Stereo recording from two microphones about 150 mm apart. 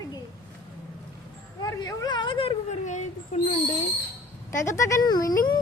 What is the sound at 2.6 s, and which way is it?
Speech, 55° left (ahead or behind).